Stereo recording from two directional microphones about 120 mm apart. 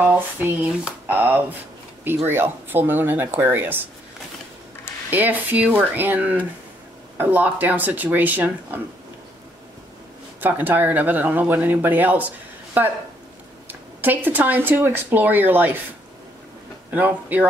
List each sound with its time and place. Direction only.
0.0 s speech: 15° right (ahead or behind)
5.1 s speech: 15° right (ahead or behind)
10.4 s speech: 15° right (ahead or behind)
16.9 s speech: 15° right (ahead or behind)